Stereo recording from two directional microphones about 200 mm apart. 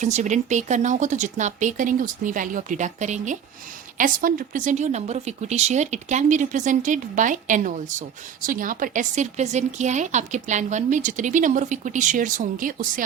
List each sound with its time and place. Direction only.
0.0 s speech: 35° right (ahead or behind)